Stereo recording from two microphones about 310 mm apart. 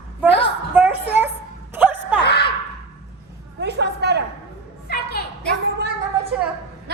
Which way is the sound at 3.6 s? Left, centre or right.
Right.